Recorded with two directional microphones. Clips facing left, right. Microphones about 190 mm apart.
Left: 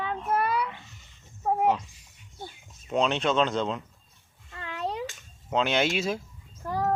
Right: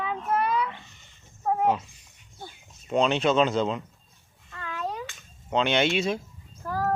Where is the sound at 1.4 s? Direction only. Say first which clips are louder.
Even; 5° left (ahead or behind).